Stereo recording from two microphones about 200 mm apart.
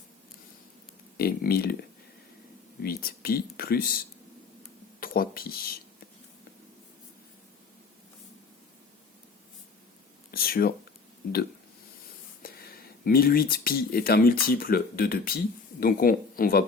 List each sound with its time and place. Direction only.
1.1 s speech: 50° left (ahead or behind)
2.8 s speech: 50° left (ahead or behind)
10.3 s speech: 50° left (ahead or behind)
12.4 s speech: 50° left (ahead or behind)